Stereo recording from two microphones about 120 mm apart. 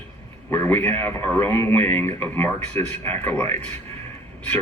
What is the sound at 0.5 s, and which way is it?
Speech, 15° left (ahead or behind).